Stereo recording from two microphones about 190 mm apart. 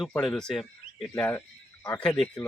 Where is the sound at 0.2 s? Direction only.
Centre (ahead or behind).